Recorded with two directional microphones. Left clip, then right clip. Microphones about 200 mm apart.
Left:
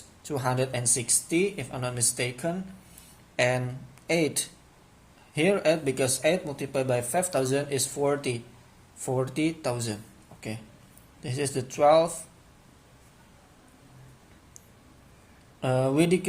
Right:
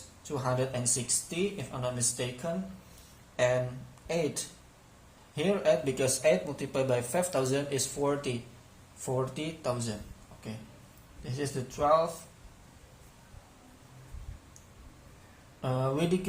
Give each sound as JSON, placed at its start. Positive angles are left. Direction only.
{"t": 0.3, "sound": "speech", "side_deg": 40}
{"t": 3.3, "sound": "speech", "side_deg": 40}
{"t": 5.3, "sound": "speech", "side_deg": 40}
{"t": 11.2, "sound": "speech", "side_deg": 40}
{"t": 15.6, "sound": "speech", "side_deg": 40}